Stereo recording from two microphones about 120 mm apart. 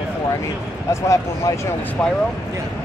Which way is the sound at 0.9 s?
25° left (ahead or behind).